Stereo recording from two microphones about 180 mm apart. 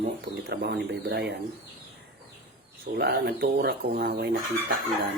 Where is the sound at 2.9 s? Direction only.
65° right (ahead or behind).